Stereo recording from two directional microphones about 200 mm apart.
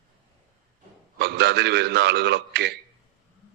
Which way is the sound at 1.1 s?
55° right (ahead or behind).